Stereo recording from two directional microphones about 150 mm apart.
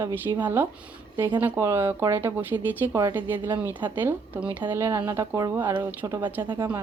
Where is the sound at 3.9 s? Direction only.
15° right (ahead or behind); by 6.7 s 30° right (ahead or behind).